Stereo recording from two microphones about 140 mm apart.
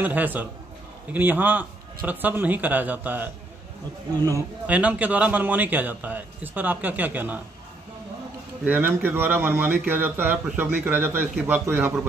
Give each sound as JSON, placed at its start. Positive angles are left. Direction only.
{"t": 0.0, "sound": "a man's voice", "side_deg": -10}
{"t": 4.2, "sound": "a man's voice", "side_deg": -25}
{"t": 4.6, "sound": "a man's voice", "side_deg": -10}
{"t": 8.6, "sound": "a man's voice", "side_deg": -15}